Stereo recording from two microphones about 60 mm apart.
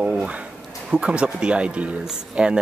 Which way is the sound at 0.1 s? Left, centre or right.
Centre.